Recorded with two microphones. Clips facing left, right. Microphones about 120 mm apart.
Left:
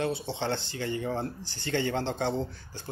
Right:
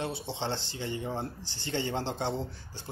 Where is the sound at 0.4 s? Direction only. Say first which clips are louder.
Left 3 dB; 25° right (ahead or behind).